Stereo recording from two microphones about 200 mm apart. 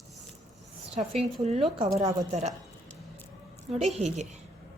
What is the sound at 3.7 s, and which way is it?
Speech, 30° right (ahead or behind).